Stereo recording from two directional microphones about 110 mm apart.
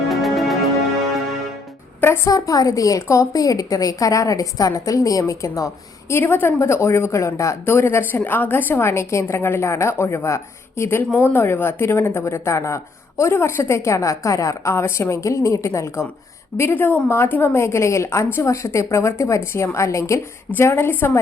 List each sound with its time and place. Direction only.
0.1 s music: centre (ahead or behind)
2.0 s a woman's voice: 20° left (ahead or behind)
2.3 s a woman's voice: 30° left (ahead or behind)